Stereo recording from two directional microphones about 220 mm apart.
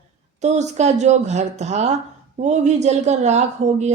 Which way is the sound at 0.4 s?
30° right (ahead or behind).